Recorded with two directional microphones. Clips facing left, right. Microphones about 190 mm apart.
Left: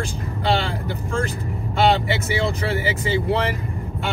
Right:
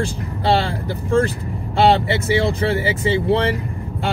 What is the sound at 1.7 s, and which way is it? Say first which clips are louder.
Speech: right 3 dB; 30° right (ahead or behind).